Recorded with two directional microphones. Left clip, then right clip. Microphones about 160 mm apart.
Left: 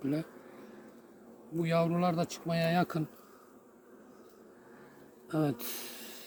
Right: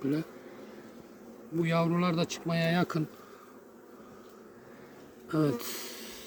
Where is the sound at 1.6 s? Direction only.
15° left (ahead or behind).